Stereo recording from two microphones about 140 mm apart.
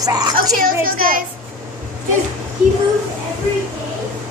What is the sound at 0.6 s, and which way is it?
Speech, 90° right.